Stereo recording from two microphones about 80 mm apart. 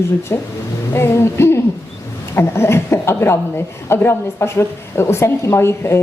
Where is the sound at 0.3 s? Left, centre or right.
Left.